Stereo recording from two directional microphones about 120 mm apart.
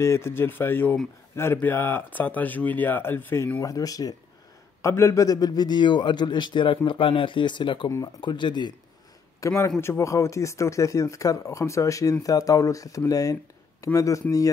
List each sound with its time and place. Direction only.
0.0 s speech: 20° left (ahead or behind)
3.6 s a man's voice: 30° left (ahead or behind)
9.4 s speech: 30° left (ahead or behind)